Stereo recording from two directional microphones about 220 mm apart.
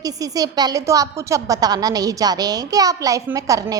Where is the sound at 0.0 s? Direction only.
15° right (ahead or behind).